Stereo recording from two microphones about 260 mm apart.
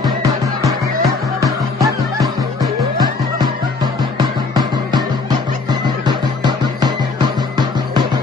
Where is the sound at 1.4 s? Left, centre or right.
Centre.